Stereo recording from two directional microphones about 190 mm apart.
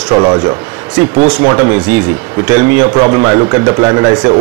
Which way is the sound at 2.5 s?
20° right (ahead or behind).